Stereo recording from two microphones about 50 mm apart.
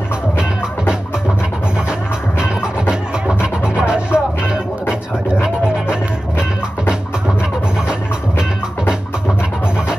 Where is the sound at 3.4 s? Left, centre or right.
Centre.